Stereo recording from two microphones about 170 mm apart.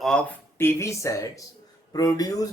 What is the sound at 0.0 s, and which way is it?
Speech, 5° left (ahead or behind).